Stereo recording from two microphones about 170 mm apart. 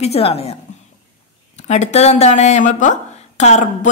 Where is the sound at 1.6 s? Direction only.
40° left (ahead or behind).